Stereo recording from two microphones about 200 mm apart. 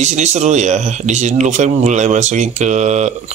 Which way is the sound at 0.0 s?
35° right (ahead or behind).